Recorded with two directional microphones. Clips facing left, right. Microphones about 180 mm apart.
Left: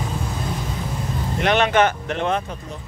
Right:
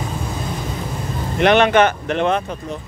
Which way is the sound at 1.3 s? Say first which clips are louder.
Right 5 dB; 70° right (ahead or behind).